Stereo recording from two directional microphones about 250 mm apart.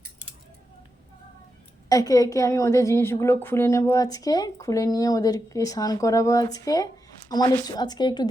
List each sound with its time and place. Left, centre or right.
1.9 s a woman's voice: centre